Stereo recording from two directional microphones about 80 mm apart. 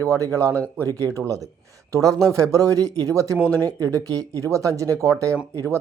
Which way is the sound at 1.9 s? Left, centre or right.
Right.